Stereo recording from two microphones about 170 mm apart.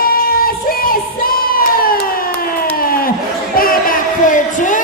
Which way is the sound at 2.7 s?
60° left (ahead or behind).